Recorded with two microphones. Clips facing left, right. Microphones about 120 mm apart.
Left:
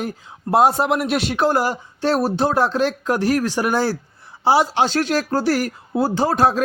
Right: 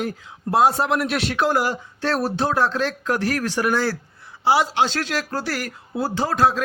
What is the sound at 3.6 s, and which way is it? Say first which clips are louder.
A man's voice: left 2 dB; 20° left (ahead or behind).